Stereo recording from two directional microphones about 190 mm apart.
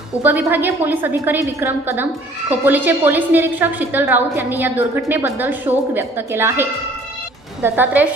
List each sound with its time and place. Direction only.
0.2 s a woman's voice: 10° right (ahead or behind)